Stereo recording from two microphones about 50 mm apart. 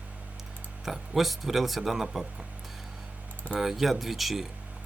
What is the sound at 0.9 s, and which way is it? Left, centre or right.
Speech, centre.